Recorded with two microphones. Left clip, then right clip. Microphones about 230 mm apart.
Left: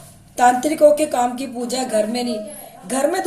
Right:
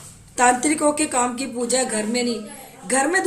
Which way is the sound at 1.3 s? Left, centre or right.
Right.